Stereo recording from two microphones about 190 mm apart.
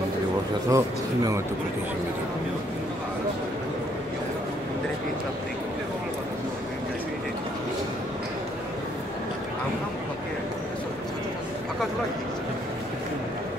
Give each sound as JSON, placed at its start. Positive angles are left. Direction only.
{"t": 0.7, "sound": "speech", "side_deg": -15}